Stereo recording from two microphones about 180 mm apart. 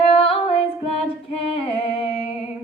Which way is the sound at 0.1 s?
30° left (ahead or behind).